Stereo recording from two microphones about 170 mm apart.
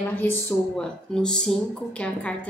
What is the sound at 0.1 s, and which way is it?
Speech, 10° left (ahead or behind).